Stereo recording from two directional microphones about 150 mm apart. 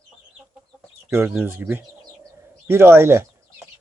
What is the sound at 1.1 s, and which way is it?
Speech, 10° right (ahead or behind).